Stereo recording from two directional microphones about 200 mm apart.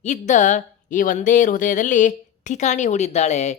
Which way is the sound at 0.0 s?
35° left (ahead or behind).